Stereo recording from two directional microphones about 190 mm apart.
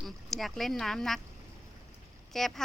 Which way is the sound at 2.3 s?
Centre (ahead or behind).